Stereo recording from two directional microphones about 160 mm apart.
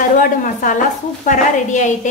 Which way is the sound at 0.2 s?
55° left (ahead or behind).